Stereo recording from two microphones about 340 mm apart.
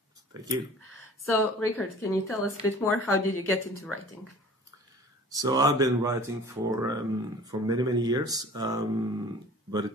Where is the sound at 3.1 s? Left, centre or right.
Left.